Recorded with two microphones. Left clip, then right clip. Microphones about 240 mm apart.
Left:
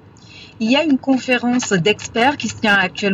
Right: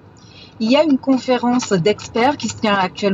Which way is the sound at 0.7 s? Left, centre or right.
Right.